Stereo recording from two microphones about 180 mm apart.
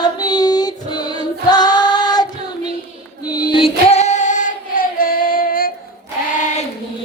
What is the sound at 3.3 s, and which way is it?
Choir, 25° left (ahead or behind).